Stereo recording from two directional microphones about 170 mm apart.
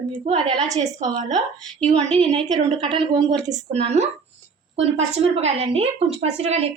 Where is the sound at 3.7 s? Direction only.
40° right (ahead or behind).